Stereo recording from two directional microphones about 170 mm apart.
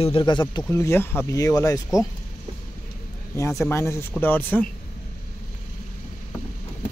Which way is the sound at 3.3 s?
20° left (ahead or behind).